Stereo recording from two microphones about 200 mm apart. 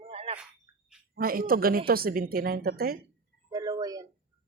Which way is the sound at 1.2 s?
45° right (ahead or behind).